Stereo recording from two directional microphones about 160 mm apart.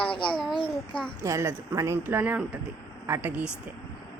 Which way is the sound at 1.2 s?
15° right (ahead or behind).